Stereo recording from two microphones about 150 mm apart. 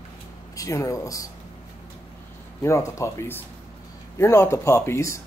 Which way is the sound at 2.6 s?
20° left (ahead or behind).